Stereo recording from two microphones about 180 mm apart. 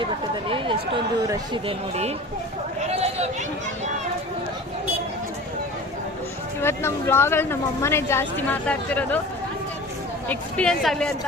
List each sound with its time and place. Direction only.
0.0 s speech: 30° right (ahead or behind)
2.9 s a sound: 35° right (ahead or behind)
6.6 s a woman's voice: 15° left (ahead or behind)
10.2 s a woman's voice: 5° left (ahead or behind)